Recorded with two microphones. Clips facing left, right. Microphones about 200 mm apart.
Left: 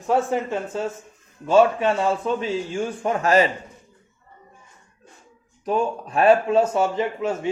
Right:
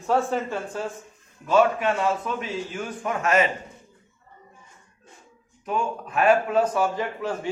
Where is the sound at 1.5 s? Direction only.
30° left (ahead or behind).